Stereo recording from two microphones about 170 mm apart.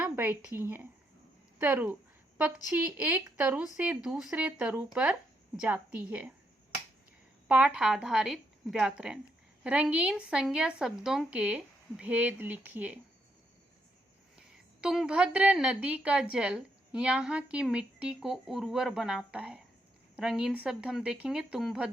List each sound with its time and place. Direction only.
0.0 s a woman's voice: 10° right (ahead or behind)
7.4 s a woman's voice: 5° right (ahead or behind)
14.3 s a woman's voice: 5° right (ahead or behind)